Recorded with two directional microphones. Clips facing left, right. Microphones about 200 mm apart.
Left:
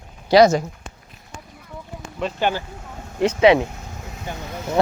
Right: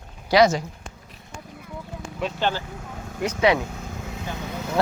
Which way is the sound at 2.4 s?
15° left (ahead or behind).